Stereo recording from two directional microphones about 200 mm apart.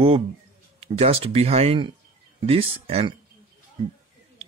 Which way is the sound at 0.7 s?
30° right (ahead or behind).